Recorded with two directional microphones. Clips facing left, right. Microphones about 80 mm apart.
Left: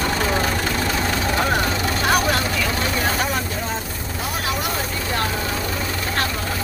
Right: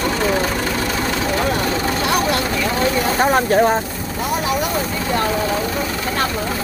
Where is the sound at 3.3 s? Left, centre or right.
Right.